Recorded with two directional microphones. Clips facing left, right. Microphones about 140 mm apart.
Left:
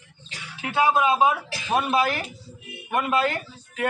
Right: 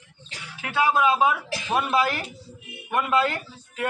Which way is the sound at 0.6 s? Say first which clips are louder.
Left 1 dB; 20° left (ahead or behind).